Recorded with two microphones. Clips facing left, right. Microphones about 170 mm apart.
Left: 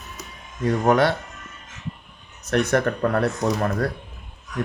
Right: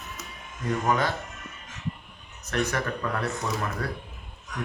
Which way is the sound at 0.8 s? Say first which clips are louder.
Left 8 dB; 65° left (ahead or behind).